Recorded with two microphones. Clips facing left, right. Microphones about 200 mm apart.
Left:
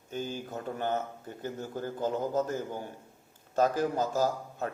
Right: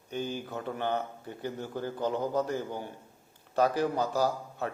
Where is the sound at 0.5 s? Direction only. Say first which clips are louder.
Even; 45° left (ahead or behind).